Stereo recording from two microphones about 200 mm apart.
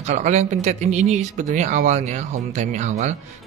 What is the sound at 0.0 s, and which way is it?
Speech, 35° right (ahead or behind).